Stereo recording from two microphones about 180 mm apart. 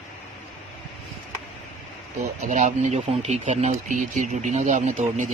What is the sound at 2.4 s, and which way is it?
Speech, 40° right (ahead or behind).